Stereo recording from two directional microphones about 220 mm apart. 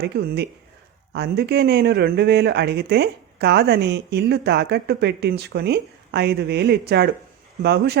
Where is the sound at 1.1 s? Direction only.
50° right (ahead or behind).